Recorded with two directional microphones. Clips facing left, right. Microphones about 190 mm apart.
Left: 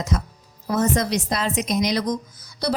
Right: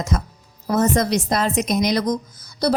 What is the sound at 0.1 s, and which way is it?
A woman's voice, 50° right (ahead or behind).